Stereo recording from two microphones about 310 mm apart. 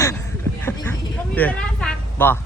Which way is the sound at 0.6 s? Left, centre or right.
Centre.